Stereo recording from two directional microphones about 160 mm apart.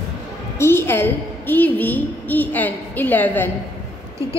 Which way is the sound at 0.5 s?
15° left (ahead or behind).